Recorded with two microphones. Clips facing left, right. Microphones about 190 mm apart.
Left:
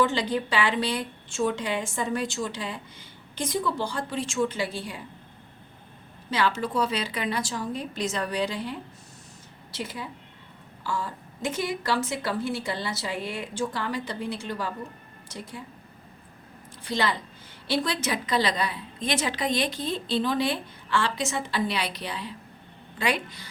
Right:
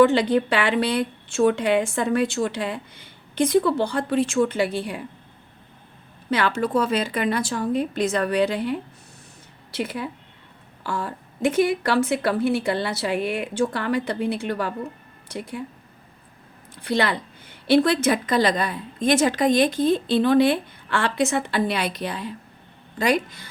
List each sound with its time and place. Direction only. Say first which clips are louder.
0.0 s a woman's voice: right 8 dB; 60° right (ahead or behind)
6.3 s a woman's voice: right 4 dB; 55° right (ahead or behind)
9.7 s a woman's voice: right 7 dB; 60° right (ahead or behind)
16.8 s a woman's voice: right 5 dB; 60° right (ahead or behind); by 23.5 s 45° right (ahead or behind)